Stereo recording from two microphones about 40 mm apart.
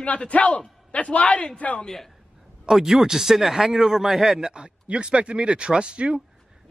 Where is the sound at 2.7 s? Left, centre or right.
Centre.